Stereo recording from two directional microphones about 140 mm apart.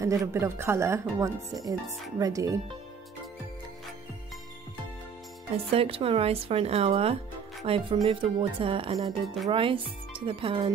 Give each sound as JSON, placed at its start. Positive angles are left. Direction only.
{"t": 0.0, "sound": "speech", "side_deg": -20}
{"t": 5.7, "sound": "speech", "side_deg": -45}